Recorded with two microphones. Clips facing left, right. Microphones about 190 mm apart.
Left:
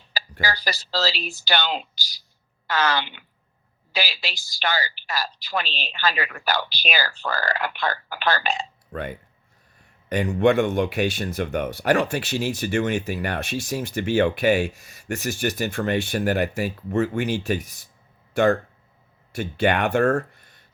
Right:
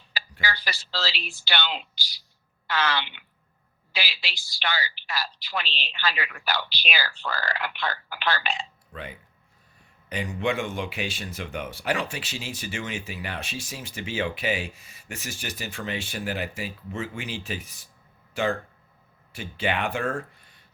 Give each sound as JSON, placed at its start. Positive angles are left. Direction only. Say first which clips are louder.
{"t": 0.1, "sound": "a woman's voice", "louder": "left 4 dB", "side_deg": 40}
{"t": 13.7, "sound": "a woman's voice", "louder": "left 10 dB", "side_deg": 60}
{"t": 14.9, "sound": "a sound", "louder": "left 13 dB", "side_deg": 45}
{"t": 15.2, "sound": "speech", "louder": "left 9 dB", "side_deg": 65}
{"t": 15.4, "sound": "speech", "louder": "left 10 dB", "side_deg": 45}
{"t": 17.3, "sound": "a woman's voice", "louder": "left 9 dB", "side_deg": 45}
{"t": 19.4, "sound": "a woman's voice", "louder": "left 7 dB", "side_deg": 45}